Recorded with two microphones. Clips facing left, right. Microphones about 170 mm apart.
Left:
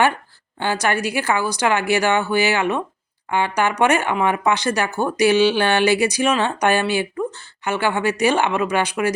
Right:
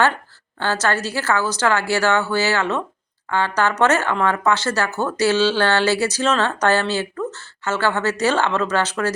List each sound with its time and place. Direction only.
0.6 s speech: 15° left (ahead or behind)